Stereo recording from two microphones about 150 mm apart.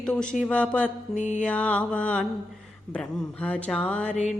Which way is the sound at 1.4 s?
10° left (ahead or behind).